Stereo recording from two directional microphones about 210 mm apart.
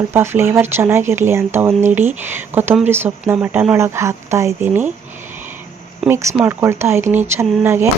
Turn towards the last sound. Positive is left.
turn(degrees=-10)  # may be behind; listen again after turning